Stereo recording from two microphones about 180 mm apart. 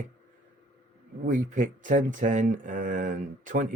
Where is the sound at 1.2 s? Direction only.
45° right (ahead or behind).